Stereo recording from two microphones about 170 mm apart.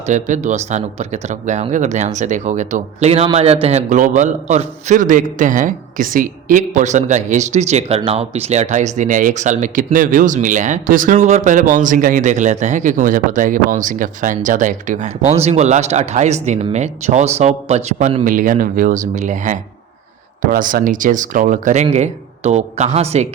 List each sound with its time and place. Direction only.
0.0 s a man's voice: 45° right (ahead or behind)